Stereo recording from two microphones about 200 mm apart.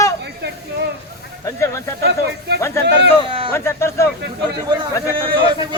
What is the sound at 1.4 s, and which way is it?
Speech, 15° left (ahead or behind).